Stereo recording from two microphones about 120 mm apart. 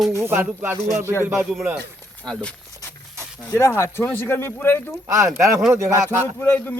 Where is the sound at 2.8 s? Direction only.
25° left (ahead or behind).